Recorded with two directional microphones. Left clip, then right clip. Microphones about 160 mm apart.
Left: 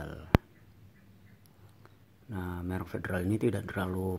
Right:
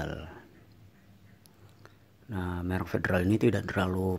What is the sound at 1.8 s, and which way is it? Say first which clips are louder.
Speech: right 3 dB; 10° right (ahead or behind).